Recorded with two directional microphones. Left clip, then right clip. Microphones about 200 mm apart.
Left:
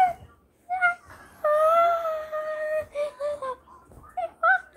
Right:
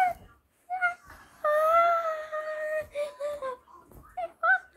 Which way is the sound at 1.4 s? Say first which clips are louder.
Left 3 dB; 5° right (ahead or behind).